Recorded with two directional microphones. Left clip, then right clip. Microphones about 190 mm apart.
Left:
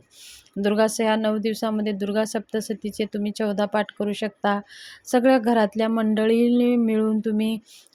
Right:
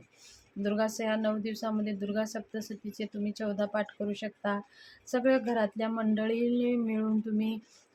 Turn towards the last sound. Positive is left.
turn(degrees=40)  # may be behind; listen again after turning